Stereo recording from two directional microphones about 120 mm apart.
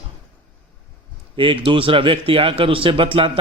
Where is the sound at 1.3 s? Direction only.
45° right (ahead or behind).